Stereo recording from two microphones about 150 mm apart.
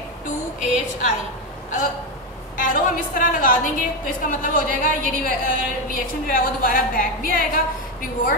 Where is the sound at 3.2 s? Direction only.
70° left (ahead or behind).